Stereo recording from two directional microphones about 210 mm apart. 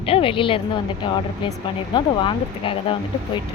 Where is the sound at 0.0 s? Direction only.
25° left (ahead or behind).